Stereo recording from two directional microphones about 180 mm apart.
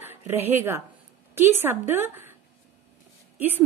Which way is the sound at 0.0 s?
10° right (ahead or behind).